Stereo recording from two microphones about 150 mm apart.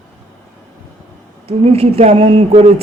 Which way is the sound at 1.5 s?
40° right (ahead or behind).